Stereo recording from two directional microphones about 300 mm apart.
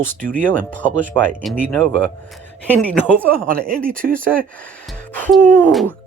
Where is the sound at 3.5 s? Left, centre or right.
Right.